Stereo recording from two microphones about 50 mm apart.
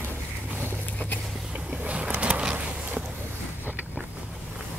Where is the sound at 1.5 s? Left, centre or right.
Right.